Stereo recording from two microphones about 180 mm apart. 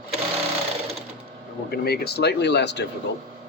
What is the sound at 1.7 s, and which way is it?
Speech, 60° left (ahead or behind).